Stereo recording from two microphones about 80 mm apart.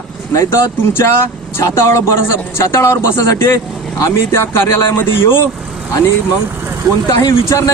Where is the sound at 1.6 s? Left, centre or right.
Left.